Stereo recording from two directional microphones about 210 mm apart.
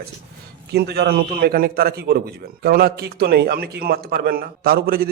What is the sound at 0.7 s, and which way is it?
A man's voice, 50° right (ahead or behind).